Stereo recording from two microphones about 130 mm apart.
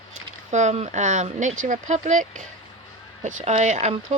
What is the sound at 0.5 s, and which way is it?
Speech, 65° right (ahead or behind).